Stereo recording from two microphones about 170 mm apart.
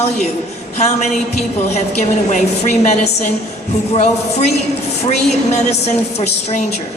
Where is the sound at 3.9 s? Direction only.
40° left (ahead or behind).